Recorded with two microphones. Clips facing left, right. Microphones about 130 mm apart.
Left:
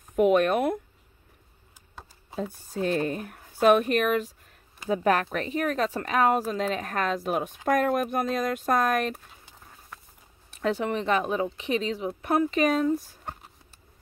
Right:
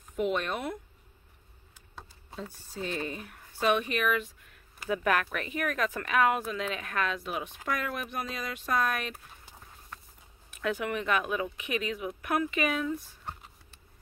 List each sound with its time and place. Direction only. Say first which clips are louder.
0.1 s speech: left 9 dB; 50° left (ahead or behind)
2.7 s speech: left 8 dB; 50° left (ahead or behind)
10.5 s speech: left 5 dB; 30° left (ahead or behind)